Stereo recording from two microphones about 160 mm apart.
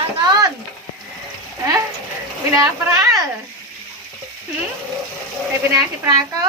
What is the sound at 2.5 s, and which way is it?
Speech, 20° right (ahead or behind).